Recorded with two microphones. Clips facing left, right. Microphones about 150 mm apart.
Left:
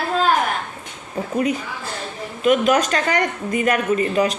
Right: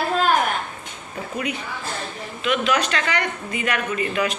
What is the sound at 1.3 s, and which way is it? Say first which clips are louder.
A woman's voice: left 7 dB; 40° left (ahead or behind).